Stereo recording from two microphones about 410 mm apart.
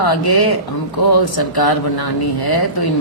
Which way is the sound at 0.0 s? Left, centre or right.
Left.